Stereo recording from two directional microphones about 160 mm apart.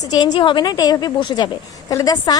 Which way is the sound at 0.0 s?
25° left (ahead or behind).